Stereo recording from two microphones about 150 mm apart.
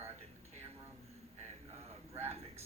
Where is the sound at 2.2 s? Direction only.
45° right (ahead or behind).